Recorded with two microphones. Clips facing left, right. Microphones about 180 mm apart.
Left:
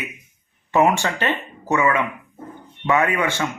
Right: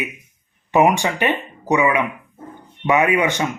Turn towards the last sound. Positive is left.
turn(degrees=-15)  # may be behind; listen again after turning